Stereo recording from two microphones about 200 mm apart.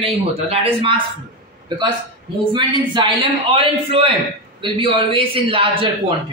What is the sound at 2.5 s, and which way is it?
A man's voice, 25° right (ahead or behind).